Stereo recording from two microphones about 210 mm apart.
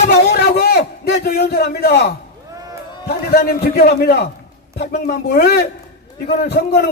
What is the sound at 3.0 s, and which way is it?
A man's voice, 45° left (ahead or behind).